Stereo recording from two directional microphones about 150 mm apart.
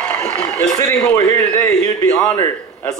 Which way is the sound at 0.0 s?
10° left (ahead or behind).